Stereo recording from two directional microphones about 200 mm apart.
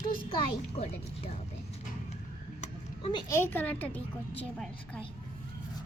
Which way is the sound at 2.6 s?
30° left (ahead or behind).